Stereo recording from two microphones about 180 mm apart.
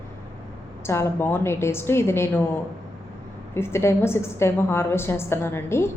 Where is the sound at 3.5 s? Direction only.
15° left (ahead or behind).